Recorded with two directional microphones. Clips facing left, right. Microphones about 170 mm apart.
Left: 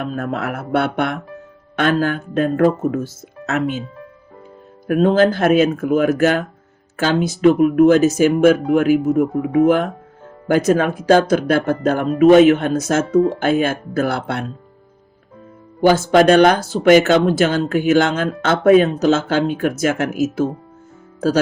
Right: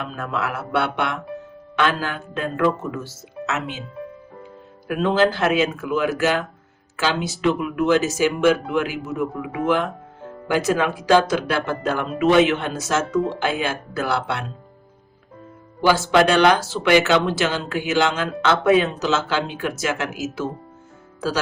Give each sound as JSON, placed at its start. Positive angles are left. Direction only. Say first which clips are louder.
{"t": 0.0, "sound": "speech", "louder": "left 4 dB", "side_deg": 50}
{"t": 4.9, "sound": "speech", "louder": "left 5 dB", "side_deg": 45}
{"t": 15.8, "sound": "speech", "louder": "left 4 dB", "side_deg": 50}